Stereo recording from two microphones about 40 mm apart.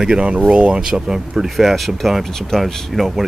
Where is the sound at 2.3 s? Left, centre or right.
Centre.